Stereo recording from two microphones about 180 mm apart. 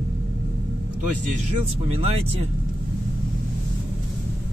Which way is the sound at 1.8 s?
35° right (ahead or behind).